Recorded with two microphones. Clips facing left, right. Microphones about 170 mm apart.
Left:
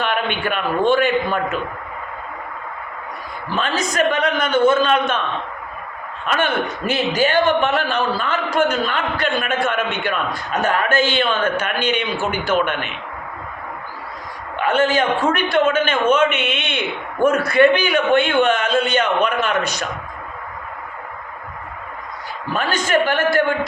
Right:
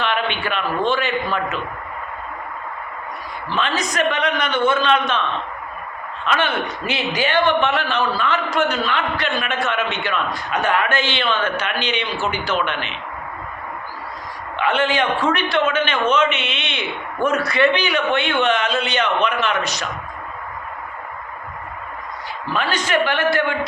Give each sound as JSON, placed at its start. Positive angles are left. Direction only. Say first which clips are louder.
{"t": 0.0, "sound": "a sound", "louder": "left 1 dB", "side_deg": 50}
{"t": 0.9, "sound": "a man's voice", "louder": "left 7 dB", "side_deg": 50}
{"t": 3.5, "sound": "a man's voice", "louder": "left 1 dB", "side_deg": 45}
{"t": 6.2, "sound": "a man's voice", "louder": "left 1 dB", "side_deg": 45}
{"t": 14.6, "sound": "a man's voice", "louder": "left 2 dB", "side_deg": 45}
{"t": 22.5, "sound": "a man's voice", "louder": "left 2 dB", "side_deg": 45}